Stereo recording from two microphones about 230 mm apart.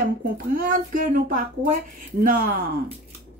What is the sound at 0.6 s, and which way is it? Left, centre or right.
Speech, right.